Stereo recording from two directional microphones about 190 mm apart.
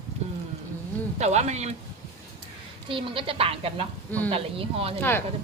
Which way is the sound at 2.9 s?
30° right (ahead or behind).